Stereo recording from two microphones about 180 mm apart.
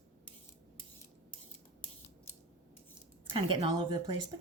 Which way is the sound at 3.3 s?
25° right (ahead or behind).